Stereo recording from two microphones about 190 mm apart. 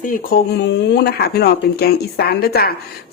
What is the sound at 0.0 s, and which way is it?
A woman's voice, 50° left (ahead or behind).